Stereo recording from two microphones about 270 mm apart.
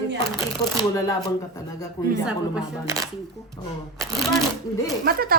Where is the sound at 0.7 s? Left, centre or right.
Centre.